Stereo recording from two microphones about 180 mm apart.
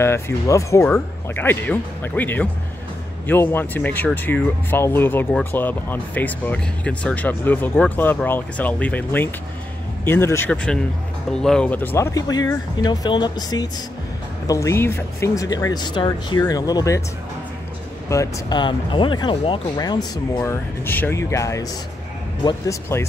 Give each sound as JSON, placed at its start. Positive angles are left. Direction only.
{"t": 0.0, "sound": "speech", "side_deg": 15}
{"t": 18.1, "sound": "speech", "side_deg": 20}
{"t": 20.8, "sound": "speech", "side_deg": 10}